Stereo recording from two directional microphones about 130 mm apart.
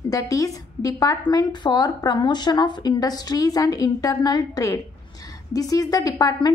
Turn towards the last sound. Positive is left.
turn(degrees=30)  # may be behind; listen again after turning